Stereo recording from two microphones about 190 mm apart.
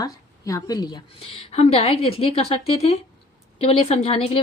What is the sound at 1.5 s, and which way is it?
A woman's voice, 35° left (ahead or behind).